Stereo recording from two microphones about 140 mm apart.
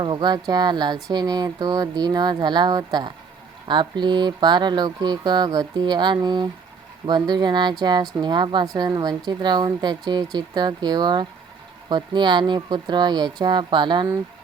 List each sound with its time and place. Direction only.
0.0 s a woman's voice: 35° right (ahead or behind)